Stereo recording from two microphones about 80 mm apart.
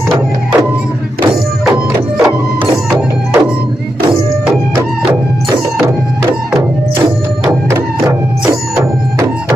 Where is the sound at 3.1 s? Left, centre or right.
Right.